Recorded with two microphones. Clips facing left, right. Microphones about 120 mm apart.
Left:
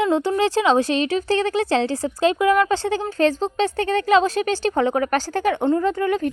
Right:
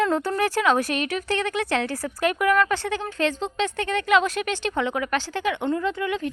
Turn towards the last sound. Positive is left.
turn(degrees=45)  # may be behind; listen again after turning